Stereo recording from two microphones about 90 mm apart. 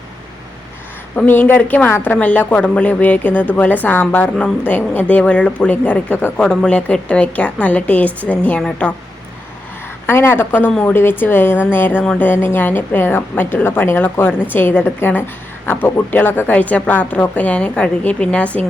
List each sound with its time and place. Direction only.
1.1 s a woman's voice: 20° left (ahead or behind)
10.1 s a woman's voice: 25° left (ahead or behind)